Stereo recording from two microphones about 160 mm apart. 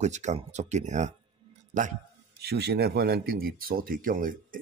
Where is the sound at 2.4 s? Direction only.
85° right; by 4.6 s 60° right (ahead or behind).